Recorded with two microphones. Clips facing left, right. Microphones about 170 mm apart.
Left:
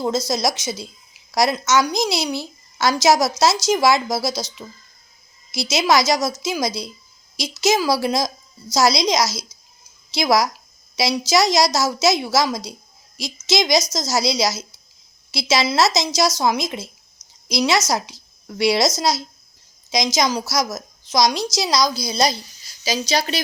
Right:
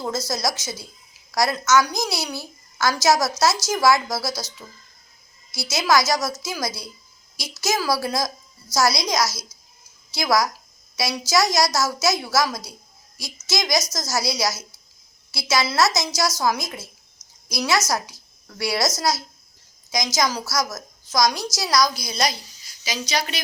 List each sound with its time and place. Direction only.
0.0 s a woman's voice: 20° left (ahead or behind)